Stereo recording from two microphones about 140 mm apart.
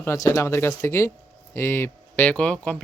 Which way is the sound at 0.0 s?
20° left (ahead or behind).